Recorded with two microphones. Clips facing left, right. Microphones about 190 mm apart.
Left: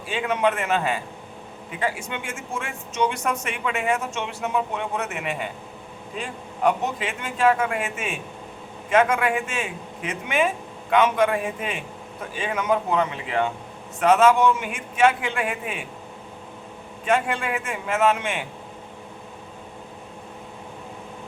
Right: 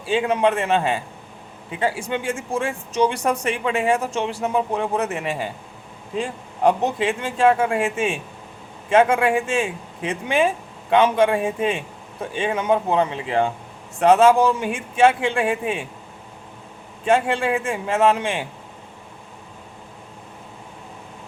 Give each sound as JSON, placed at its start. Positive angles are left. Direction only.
{"t": 0.0, "sound": "speech", "side_deg": -30}
{"t": 17.1, "sound": "speech", "side_deg": -30}